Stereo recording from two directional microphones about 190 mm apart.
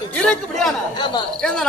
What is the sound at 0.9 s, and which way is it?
Speech, 25° left (ahead or behind).